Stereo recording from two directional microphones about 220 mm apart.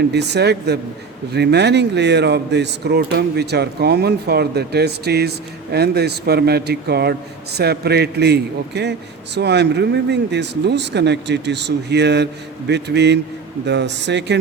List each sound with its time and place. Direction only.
0.1 s a man's voice: 50° right (ahead or behind)